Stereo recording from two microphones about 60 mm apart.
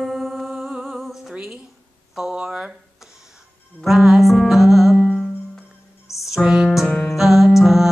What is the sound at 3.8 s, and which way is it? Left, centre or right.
Music, centre.